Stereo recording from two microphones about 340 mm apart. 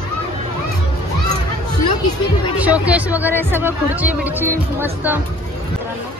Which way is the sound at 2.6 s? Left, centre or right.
Centre.